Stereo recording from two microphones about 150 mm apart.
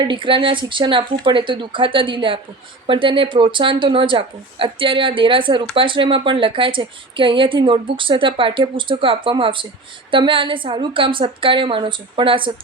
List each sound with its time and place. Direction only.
0.0 s a woman's voice: 35° right (ahead or behind)